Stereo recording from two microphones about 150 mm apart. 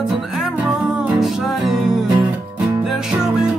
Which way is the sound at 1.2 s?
Centre (ahead or behind).